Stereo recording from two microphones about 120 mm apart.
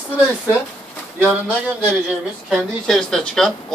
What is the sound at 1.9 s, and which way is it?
Speech, 10° right (ahead or behind).